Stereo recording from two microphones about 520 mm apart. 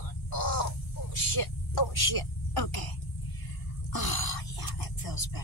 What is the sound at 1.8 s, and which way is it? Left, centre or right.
A man's voice, left.